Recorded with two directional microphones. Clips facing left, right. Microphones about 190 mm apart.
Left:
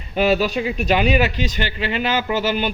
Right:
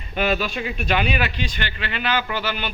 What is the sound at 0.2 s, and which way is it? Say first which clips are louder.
Speech: left 5 dB; 35° left (ahead or behind).